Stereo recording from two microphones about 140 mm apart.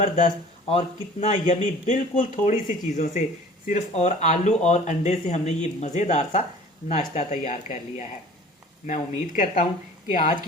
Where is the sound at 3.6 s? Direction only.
55° left (ahead or behind).